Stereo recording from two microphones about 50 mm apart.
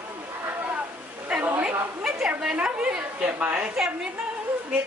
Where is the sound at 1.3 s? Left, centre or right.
Right.